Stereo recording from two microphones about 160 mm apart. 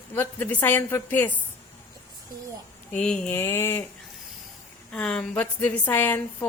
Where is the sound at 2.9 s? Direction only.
5° left (ahead or behind).